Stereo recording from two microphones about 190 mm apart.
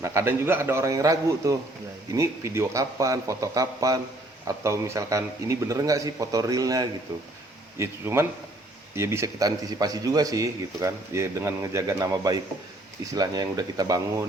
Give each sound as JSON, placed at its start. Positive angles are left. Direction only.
{"t": 0.0, "sound": "speech", "side_deg": -15}